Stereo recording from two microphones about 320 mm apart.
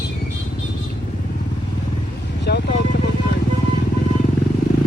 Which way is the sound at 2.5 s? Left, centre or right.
Left.